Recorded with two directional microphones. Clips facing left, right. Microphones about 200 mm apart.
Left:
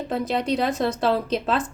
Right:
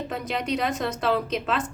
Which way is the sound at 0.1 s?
30° left (ahead or behind).